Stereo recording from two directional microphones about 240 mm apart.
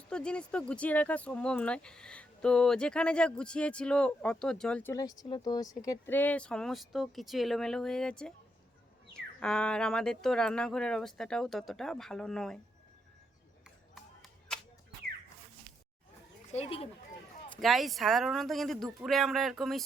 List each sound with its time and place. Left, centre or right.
0.1 s speech: centre
13.7 s a sound: centre
16.5 s speech: left
17.6 s speech: centre